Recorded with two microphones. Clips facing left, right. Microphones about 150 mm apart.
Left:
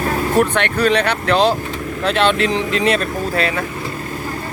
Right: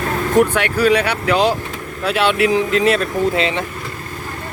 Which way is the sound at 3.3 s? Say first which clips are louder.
Even; 20° right (ahead or behind).